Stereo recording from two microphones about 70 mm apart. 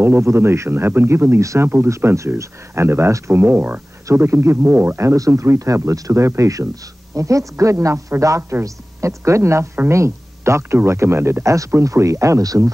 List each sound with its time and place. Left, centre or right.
0.0 s speech: right
1.4 s speech: right
4.1 s speech: right
5.0 s speech: right
8.4 s speech: right
8.6 s speech: right
11.4 s speech: right